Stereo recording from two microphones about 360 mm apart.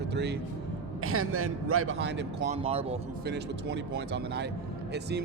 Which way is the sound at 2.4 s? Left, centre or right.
Centre.